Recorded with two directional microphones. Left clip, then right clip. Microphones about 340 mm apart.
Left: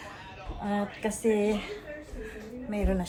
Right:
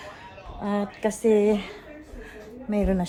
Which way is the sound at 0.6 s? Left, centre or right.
Right.